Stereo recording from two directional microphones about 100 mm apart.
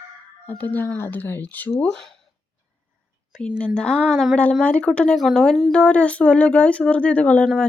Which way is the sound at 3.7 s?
10° left (ahead or behind).